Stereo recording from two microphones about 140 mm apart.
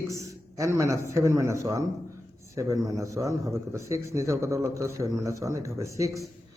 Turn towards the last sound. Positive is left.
turn(degrees=-20)  # may be behind; listen again after turning